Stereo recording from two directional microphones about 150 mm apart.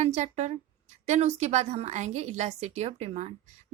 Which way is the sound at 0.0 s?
50° right (ahead or behind).